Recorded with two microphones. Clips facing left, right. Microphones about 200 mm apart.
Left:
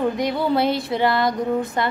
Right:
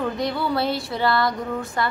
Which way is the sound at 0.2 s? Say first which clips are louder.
Left 3 dB; 20° left (ahead or behind).